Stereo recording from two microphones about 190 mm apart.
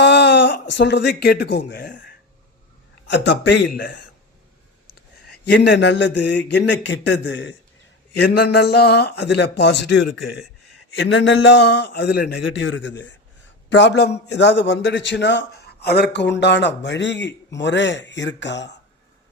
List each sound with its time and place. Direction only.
0.0 s a sound: 65° left (ahead or behind)
0.7 s speech: 65° left (ahead or behind)
3.1 s a man's voice: 70° left (ahead or behind)
5.5 s a man's voice: 65° left (ahead or behind)